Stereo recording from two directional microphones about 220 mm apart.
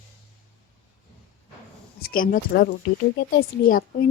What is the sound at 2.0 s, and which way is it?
Speech, 40° left (ahead or behind).